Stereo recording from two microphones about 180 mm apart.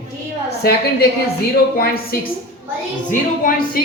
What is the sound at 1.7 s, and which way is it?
Speech, 55° left (ahead or behind).